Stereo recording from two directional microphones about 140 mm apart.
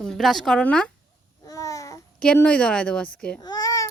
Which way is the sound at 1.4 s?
25° left (ahead or behind).